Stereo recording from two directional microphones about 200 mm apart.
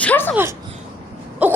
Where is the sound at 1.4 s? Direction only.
5° right (ahead or behind).